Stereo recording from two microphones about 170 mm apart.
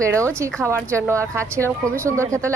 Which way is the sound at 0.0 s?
15° right (ahead or behind).